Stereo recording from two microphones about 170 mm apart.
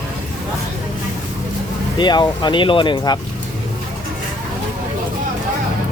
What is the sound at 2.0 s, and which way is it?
Speech, 25° left (ahead or behind).